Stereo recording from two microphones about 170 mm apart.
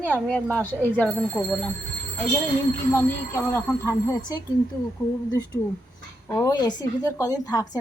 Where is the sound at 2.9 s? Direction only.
15° left (ahead or behind).